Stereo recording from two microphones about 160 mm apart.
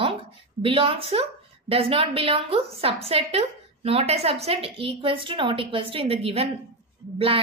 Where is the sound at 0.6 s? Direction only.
35° right (ahead or behind).